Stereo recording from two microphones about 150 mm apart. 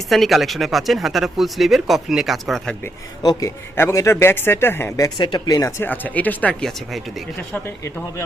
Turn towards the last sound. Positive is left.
turn(degrees=10)  # may be behind; listen again after turning